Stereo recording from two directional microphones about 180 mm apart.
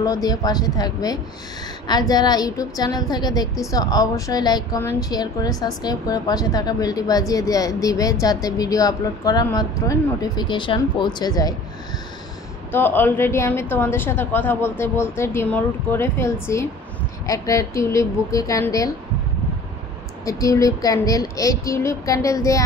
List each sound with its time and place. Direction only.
0.0 s a woman's voice: 20° left (ahead or behind)
12.7 s a woman's voice: 10° left (ahead or behind)
20.2 s a woman's voice: 20° left (ahead or behind)